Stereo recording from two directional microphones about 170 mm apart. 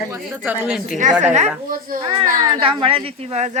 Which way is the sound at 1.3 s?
50° right (ahead or behind).